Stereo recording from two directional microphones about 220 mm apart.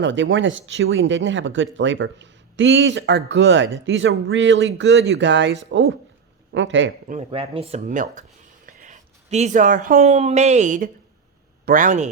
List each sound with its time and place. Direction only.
0.0 s speech: 55° right (ahead or behind)
7.1 s a man's voice: 25° right (ahead or behind)